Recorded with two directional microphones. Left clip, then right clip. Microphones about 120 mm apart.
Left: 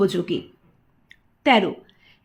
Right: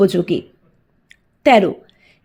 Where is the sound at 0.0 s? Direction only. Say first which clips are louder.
Right 6 dB; 50° right (ahead or behind).